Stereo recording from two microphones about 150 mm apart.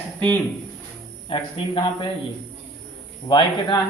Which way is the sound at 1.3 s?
35° left (ahead or behind).